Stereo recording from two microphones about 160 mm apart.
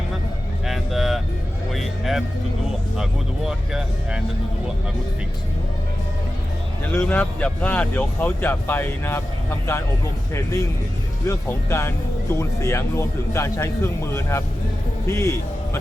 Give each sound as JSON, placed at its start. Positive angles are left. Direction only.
{"t": 0.7, "sound": "vehicle", "side_deg": 0}
{"t": 1.7, "sound": "music", "side_deg": 0}
{"t": 3.0, "sound": "speech", "side_deg": -5}
{"t": 7.0, "sound": "speech", "side_deg": 10}
{"t": 10.3, "sound": "a man's voice", "side_deg": 20}